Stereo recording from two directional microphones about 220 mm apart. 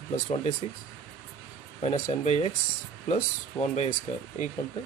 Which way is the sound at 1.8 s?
30° left (ahead or behind).